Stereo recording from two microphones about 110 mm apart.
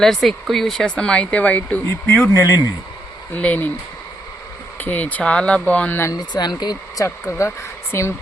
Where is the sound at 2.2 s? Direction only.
30° left (ahead or behind).